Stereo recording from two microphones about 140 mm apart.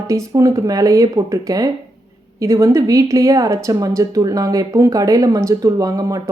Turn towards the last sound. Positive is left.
turn(degrees=-25)  # may be behind; listen again after turning